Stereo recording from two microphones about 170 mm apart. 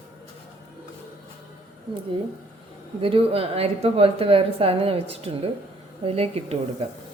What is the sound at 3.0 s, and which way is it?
A woman's voice, 35° right (ahead or behind).